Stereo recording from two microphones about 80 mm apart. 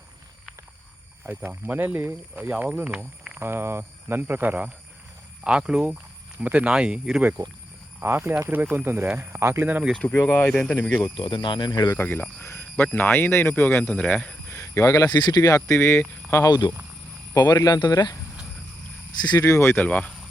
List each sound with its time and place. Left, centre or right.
1.5 s speech: right
3.4 s speech: right
5.4 s speech: centre
7.9 s speech: right
10.0 s speech: left
10.4 s speech: centre
11.2 s speech: left
12.0 s speech: centre
13.9 s speech: centre
14.5 s speech: left
16.4 s speech: left
19.3 s speech: left
19.5 s speech: left
19.8 s speech: centre